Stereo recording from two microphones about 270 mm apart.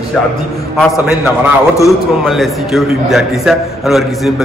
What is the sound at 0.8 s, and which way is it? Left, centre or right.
A man's voice, centre.